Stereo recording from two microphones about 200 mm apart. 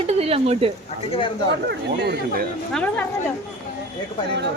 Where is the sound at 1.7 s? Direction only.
55° right (ahead or behind).